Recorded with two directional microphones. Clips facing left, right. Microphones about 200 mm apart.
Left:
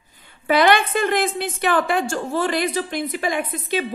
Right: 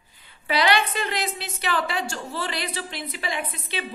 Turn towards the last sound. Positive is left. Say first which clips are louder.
# left 7 dB
turn(degrees=45)  # may be behind; listen again after turning